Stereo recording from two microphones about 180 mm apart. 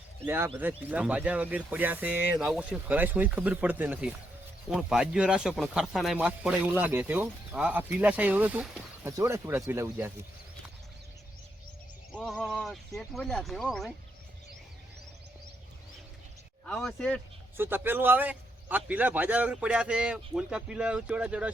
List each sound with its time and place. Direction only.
0.3 s speech: 10° right (ahead or behind)
12.1 s a sound: centre (ahead or behind)
13.0 s speech: 5° left (ahead or behind)
16.6 s speech: centre (ahead or behind)
17.6 s speech: 10° right (ahead or behind)